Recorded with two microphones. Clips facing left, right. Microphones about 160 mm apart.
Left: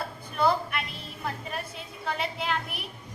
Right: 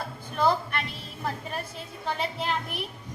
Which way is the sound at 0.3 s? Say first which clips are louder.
Even; 5° left (ahead or behind).